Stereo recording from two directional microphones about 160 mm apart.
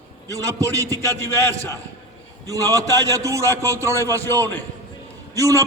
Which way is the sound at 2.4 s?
20° right (ahead or behind).